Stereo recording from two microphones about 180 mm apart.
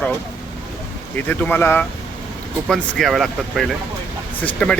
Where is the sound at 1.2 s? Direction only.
10° left (ahead or behind).